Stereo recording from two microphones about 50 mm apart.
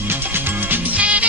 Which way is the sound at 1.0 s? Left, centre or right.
Right.